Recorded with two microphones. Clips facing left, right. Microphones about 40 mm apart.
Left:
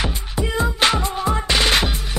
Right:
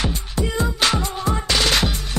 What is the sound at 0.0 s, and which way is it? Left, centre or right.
Music, centre.